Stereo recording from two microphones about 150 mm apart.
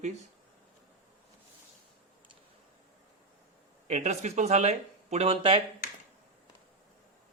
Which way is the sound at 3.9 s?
50° right (ahead or behind).